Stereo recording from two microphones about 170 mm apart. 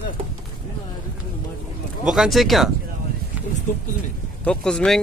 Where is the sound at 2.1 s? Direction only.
Centre (ahead or behind).